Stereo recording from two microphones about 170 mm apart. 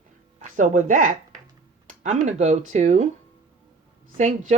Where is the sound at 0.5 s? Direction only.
45° right (ahead or behind).